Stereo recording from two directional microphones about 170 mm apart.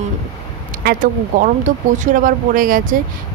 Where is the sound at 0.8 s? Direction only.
50° right (ahead or behind).